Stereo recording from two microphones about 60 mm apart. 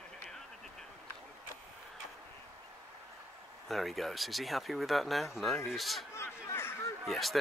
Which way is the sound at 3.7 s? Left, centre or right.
Centre.